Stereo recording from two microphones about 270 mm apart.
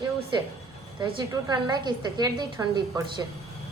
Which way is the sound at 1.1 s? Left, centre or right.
Centre.